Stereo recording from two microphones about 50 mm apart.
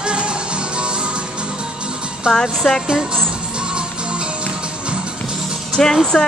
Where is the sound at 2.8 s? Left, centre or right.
Centre.